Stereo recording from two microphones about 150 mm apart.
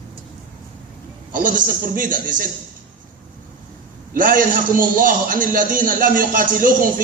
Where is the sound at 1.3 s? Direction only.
65° right (ahead or behind).